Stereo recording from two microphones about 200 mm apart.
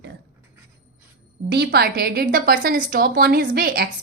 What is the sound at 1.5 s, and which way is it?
A woman's voice, 55° right (ahead or behind).